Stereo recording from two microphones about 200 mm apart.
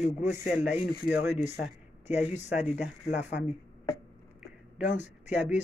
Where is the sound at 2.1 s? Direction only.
35° left (ahead or behind).